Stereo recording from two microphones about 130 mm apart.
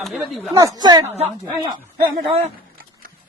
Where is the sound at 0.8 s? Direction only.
30° right (ahead or behind).